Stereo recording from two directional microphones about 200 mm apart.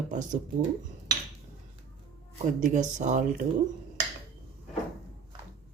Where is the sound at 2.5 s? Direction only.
40° right (ahead or behind).